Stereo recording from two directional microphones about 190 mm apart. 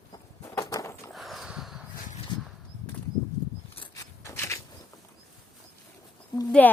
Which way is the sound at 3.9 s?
15° left (ahead or behind).